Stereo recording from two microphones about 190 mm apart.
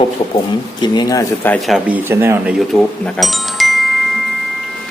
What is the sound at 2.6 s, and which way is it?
Speech, centre (ahead or behind).